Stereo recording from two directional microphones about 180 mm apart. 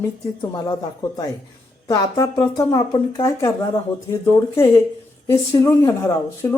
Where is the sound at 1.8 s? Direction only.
20° left (ahead or behind).